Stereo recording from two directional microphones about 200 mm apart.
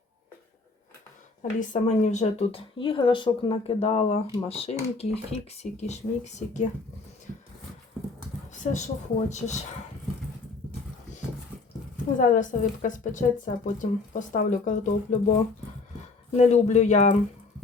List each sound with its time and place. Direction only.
1.4 s a woman's voice: 40° left (ahead or behind)
8.6 s a woman's voice: 35° left (ahead or behind)
12.1 s a woman's voice: 40° left (ahead or behind)
16.3 s a woman's voice: 35° left (ahead or behind)